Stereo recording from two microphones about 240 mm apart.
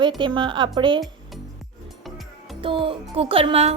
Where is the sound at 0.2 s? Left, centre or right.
Centre.